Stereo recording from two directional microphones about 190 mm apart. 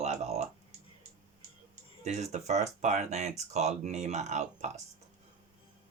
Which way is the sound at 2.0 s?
35° right (ahead or behind).